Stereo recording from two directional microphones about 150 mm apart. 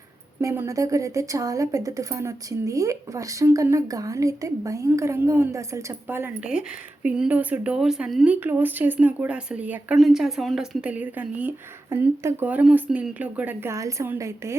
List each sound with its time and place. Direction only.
0.4 s a woman's voice: 20° right (ahead or behind)